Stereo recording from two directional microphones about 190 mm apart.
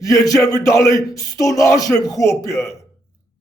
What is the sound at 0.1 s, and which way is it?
Speech, 20° left (ahead or behind).